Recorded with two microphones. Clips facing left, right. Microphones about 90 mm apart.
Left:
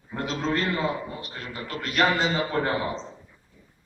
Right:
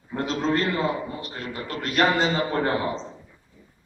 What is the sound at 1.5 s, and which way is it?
A man's voice, 20° right (ahead or behind).